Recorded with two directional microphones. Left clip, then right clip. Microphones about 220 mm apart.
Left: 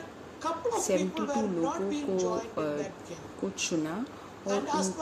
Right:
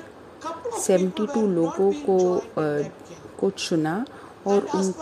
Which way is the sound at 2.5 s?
30° right (ahead or behind).